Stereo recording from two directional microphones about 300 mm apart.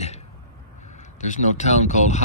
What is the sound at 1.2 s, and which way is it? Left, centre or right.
Speech, left.